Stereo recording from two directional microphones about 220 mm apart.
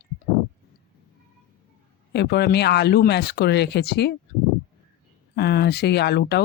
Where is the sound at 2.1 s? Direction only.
50° left (ahead or behind).